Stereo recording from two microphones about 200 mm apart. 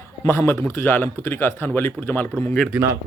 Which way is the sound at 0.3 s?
10° left (ahead or behind).